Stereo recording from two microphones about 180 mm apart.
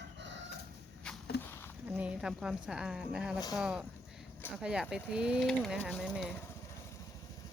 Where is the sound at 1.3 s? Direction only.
65° left (ahead or behind).